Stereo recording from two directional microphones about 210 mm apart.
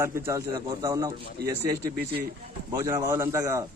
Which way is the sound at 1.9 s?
45° right (ahead or behind).